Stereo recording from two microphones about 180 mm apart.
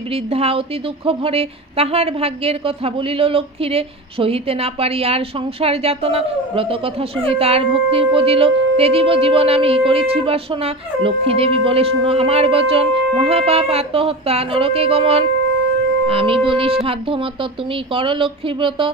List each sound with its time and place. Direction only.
0.1 s a woman's voice: 30° right (ahead or behind)